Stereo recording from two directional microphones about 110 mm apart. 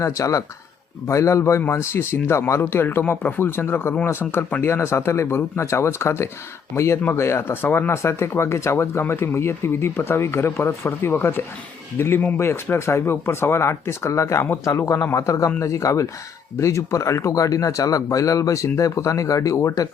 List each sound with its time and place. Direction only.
0.0 s speech: 30° left (ahead or behind)